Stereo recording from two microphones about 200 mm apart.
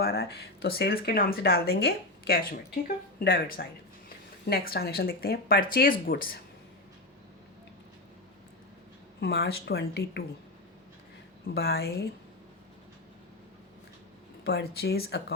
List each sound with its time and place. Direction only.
0.0 s speech: 50° left (ahead or behind)
9.2 s speech: 55° left (ahead or behind)
11.5 s speech: 50° left (ahead or behind)
14.4 s speech: 55° left (ahead or behind)